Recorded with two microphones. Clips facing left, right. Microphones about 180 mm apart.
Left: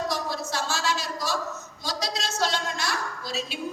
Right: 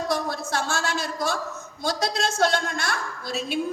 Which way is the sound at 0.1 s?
55° right (ahead or behind).